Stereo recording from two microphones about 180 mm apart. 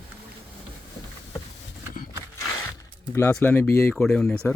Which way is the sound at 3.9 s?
Centre (ahead or behind).